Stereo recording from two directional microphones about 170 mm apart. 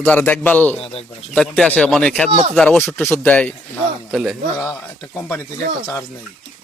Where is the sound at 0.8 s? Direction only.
35° left (ahead or behind).